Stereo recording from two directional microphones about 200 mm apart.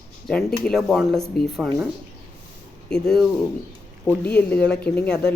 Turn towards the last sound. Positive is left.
turn(degrees=5)  # may be behind; listen again after turning